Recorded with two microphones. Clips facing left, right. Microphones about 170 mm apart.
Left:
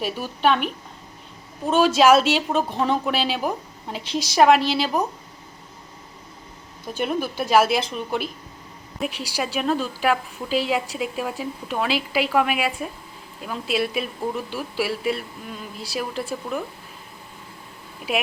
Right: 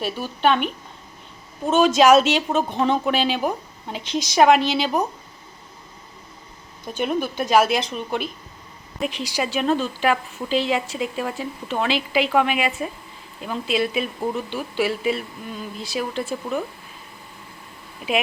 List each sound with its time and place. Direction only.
0.0 s a woman's voice: 5° left (ahead or behind)
6.8 s a woman's voice: 5° left (ahead or behind)